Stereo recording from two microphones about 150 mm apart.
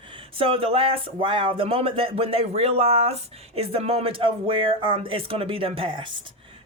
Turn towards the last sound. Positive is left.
turn(degrees=-30)  # may be behind; listen again after turning